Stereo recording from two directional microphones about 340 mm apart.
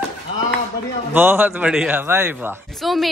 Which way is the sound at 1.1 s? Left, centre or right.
Centre.